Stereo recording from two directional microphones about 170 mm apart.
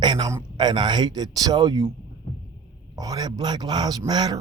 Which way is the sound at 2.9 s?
20° right (ahead or behind).